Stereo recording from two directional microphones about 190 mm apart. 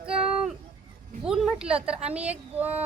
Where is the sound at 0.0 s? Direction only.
5° right (ahead or behind).